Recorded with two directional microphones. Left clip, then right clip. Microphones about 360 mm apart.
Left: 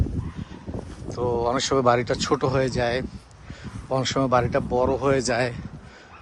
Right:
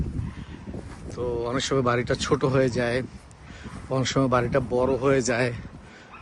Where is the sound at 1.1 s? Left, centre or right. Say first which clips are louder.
Left 4 dB; centre.